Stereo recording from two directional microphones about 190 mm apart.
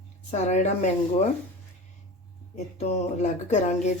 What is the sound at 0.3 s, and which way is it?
Speech, 35° left (ahead or behind).